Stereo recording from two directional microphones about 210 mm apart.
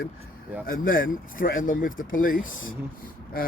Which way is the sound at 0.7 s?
40° left (ahead or behind).